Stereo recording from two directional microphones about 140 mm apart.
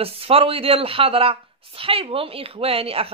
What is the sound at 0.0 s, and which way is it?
Speech, 45° right (ahead or behind).